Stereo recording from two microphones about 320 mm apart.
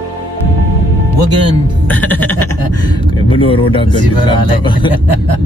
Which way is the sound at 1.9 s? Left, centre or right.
Centre.